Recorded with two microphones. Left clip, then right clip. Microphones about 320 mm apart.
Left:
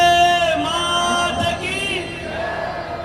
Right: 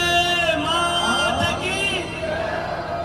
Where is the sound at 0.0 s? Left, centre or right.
Centre.